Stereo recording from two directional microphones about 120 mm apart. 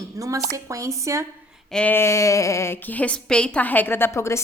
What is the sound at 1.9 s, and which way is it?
A woman's voice, 25° left (ahead or behind).